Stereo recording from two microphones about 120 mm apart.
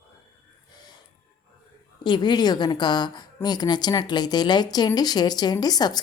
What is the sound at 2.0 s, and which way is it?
A woman's voice, 40° left (ahead or behind).